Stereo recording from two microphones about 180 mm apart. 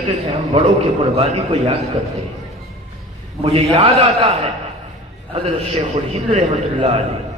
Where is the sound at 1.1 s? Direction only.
35° right (ahead or behind).